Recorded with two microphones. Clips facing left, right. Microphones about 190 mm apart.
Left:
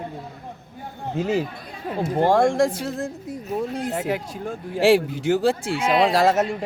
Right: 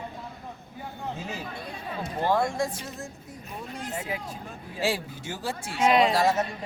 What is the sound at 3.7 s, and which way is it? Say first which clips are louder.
Speech: left 9 dB; 60° left (ahead or behind).